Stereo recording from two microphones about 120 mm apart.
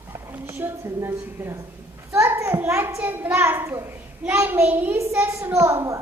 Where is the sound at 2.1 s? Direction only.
25° right (ahead or behind).